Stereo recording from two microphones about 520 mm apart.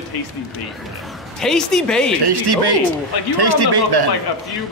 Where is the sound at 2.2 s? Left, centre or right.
Right.